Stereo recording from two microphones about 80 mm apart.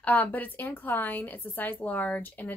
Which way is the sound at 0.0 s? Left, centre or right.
Left.